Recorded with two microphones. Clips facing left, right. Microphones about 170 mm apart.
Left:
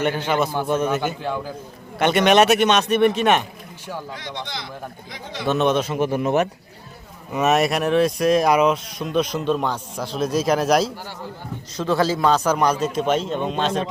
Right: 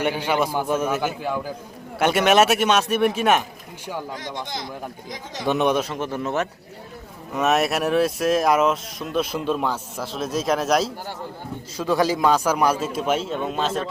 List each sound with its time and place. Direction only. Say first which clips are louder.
0.0 s a man's voice: left 1 dB; 10° right (ahead or behind)
4.1 s a man's voice: right 1 dB; 45° right (ahead or behind)
5.5 s a man's voice: left 1 dB; 15° right (ahead or behind)
5.8 s speech: left 5 dB; 10° left (ahead or behind)
7.3 s speech: left 2 dB; centre (ahead or behind)
11.8 s a man's voice: even; 15° right (ahead or behind)